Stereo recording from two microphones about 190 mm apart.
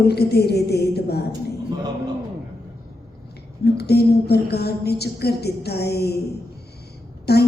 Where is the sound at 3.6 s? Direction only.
60° left (ahead or behind).